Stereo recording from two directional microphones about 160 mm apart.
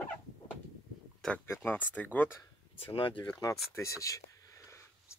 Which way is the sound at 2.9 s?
35° left (ahead or behind).